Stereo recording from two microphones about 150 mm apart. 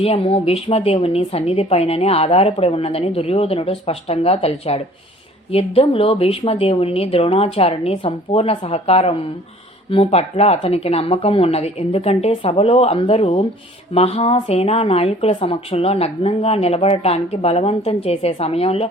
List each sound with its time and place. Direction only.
0.0 s a woman's voice: 40° left (ahead or behind)